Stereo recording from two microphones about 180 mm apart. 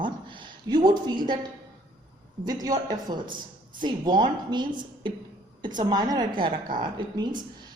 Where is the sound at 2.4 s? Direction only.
20° right (ahead or behind).